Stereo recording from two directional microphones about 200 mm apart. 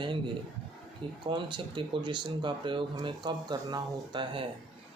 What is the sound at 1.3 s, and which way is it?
Speech, 25° right (ahead or behind).